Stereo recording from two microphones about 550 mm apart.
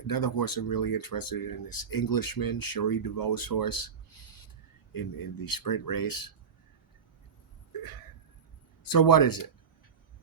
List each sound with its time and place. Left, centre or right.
0.1 s speech: left
7.7 s a sound: left
8.8 s speech: left